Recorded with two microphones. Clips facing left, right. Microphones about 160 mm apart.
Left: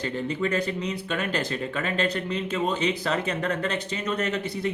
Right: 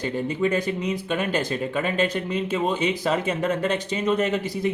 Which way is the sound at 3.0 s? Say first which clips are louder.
Right 3 dB; 20° right (ahead or behind).